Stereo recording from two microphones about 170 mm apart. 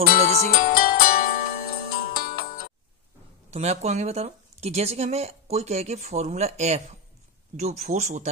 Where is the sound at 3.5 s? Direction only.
40° right (ahead or behind).